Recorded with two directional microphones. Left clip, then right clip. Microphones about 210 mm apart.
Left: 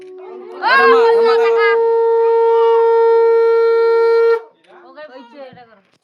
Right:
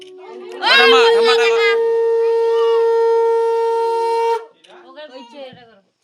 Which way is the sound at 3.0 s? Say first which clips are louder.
Left 3 dB; 10° left (ahead or behind).